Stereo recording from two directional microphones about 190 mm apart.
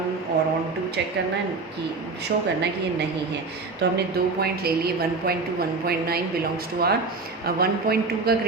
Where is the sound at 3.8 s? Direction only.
65° right (ahead or behind).